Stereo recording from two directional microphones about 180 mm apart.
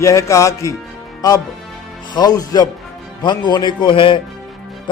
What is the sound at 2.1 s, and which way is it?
Speech, 20° left (ahead or behind).